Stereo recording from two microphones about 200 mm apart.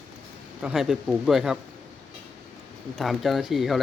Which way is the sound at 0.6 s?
Centre (ahead or behind).